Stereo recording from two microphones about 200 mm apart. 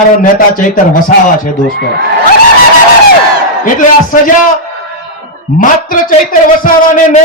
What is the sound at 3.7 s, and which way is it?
Speech, 40° left (ahead or behind).